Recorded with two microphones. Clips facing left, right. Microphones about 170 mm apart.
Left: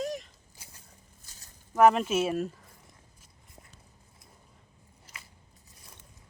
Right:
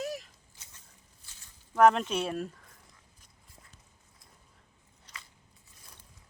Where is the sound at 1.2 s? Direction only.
40° left (ahead or behind).